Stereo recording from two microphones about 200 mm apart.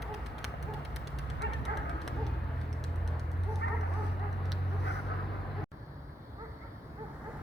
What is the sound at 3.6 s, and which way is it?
Dog, 60° left (ahead or behind).